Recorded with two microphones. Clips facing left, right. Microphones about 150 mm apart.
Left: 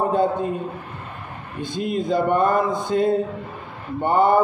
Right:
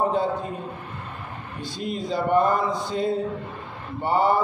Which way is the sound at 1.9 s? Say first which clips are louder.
Left 4 dB; 50° left (ahead or behind).